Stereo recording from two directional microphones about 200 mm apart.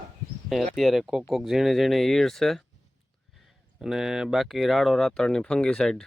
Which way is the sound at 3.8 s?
Centre (ahead or behind).